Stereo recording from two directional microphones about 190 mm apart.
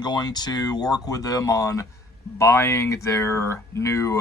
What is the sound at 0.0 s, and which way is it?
Speech, 20° left (ahead or behind).